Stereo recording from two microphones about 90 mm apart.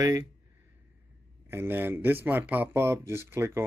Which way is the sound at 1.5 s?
25° right (ahead or behind).